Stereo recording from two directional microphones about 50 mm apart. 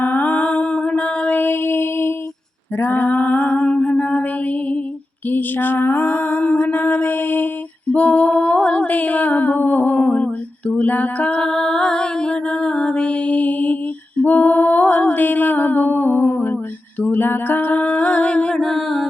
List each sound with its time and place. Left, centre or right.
0.0 s music: left
1.4 s mantra: left
2.7 s a sound: left
5.3 s music: left
7.9 s music: left
14.2 s a sound: left
18.5 s music: centre